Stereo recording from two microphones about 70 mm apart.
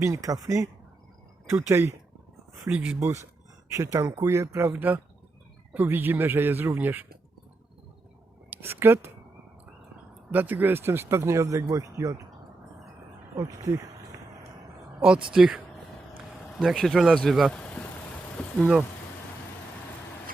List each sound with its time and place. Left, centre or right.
0.0 s speech: right
1.7 s speech: right
2.6 s speech: right
3.0 s speech: right
8.4 s speech: right
10.3 s speech: right
13.3 s speech: right
15.0 s speech: centre
16.6 s speech: centre
17.2 s speech: centre
17.5 s vehicle: centre
18.4 s speech: left